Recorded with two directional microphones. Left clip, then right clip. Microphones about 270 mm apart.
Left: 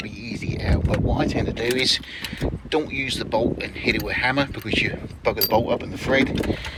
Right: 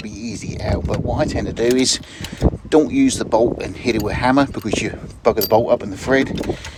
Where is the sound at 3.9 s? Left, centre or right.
Right.